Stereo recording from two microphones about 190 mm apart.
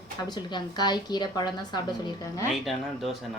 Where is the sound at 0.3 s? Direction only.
20° left (ahead or behind).